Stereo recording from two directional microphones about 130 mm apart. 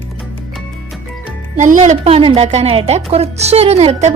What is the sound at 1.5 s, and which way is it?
A woman's voice, 70° right (ahead or behind).